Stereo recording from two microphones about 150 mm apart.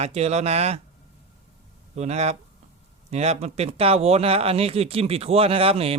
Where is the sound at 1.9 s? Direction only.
45° right (ahead or behind).